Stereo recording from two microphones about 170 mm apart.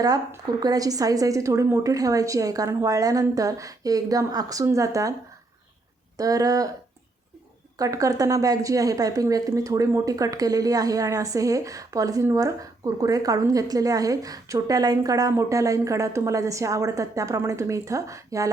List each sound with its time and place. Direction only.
0.0 s speech: 20° right (ahead or behind)
6.1 s speech: 20° right (ahead or behind)
7.8 s speech: 20° right (ahead or behind)